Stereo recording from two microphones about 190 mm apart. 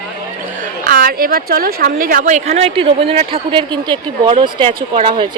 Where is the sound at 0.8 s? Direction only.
50° right (ahead or behind); by 5.3 s 30° right (ahead or behind).